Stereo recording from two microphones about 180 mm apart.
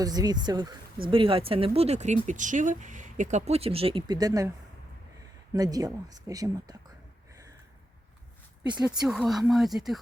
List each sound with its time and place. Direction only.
0.0 s speech: 20° right (ahead or behind)
5.5 s speech: 20° right (ahead or behind)
9.0 s speech: centre (ahead or behind)